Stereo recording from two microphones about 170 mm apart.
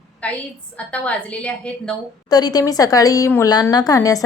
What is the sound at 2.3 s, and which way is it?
Speech, 20° left (ahead or behind).